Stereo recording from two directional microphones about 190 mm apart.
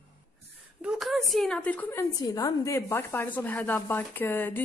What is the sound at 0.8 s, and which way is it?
A woman's voice, centre (ahead or behind).